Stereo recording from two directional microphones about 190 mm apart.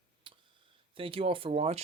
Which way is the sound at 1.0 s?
30° right (ahead or behind).